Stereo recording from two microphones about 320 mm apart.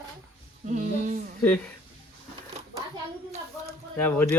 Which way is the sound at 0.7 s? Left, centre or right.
Right.